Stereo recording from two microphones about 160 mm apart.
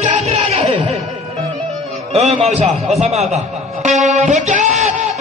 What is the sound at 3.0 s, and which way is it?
Speech, 40° right (ahead or behind).